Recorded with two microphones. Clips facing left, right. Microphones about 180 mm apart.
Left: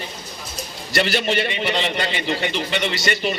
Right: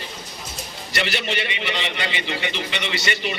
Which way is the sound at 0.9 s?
40° left (ahead or behind).